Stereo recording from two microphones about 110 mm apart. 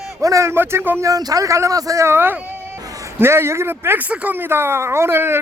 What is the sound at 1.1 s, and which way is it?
Speech, 35° right (ahead or behind).